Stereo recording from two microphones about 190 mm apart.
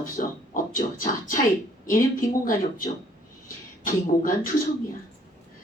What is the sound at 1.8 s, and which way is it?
Speech, 45° left (ahead or behind).